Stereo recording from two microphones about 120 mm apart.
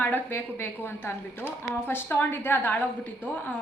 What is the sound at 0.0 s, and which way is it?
A woman's voice, 15° left (ahead or behind).